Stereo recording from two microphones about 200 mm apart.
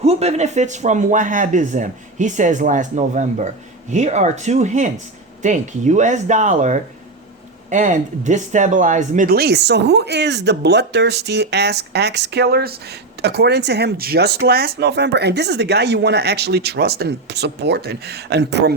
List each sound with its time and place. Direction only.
0.0 s speech: 30° right (ahead or behind); by 18.8 s 55° right (ahead or behind)